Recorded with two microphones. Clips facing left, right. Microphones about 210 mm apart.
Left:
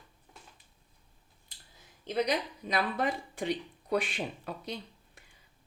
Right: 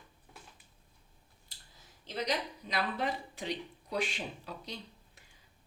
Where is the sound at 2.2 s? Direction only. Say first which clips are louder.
Left 3 dB; 50° left (ahead or behind).